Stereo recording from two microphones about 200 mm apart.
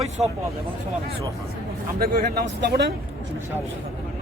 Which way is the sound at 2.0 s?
50° right (ahead or behind).